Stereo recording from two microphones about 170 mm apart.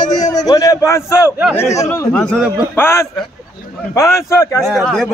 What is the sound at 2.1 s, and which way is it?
A man's voice, 5° left (ahead or behind).